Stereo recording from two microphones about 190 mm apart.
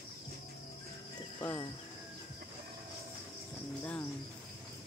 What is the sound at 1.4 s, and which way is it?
Cricket, 15° left (ahead or behind).